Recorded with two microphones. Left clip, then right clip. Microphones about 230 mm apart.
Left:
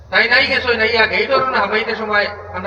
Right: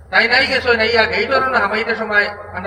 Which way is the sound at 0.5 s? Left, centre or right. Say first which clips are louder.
Right 1 dB; centre.